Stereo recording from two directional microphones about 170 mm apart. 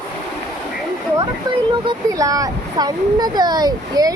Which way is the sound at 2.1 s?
20° right (ahead or behind).